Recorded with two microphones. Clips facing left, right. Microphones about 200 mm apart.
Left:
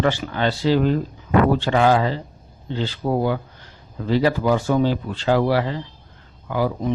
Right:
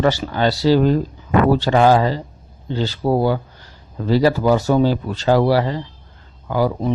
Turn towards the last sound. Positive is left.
turn(degrees=-35)  # may be behind; listen again after turning